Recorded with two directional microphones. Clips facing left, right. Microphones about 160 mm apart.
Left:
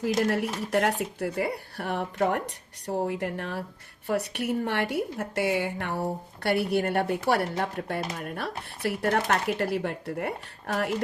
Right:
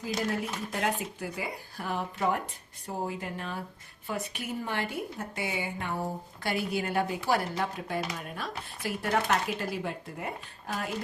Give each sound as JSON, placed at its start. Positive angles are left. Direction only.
{"t": 0.3, "sound": "speech", "side_deg": 70}